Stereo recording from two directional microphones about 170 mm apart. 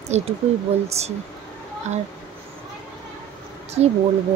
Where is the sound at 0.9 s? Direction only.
40° right (ahead or behind).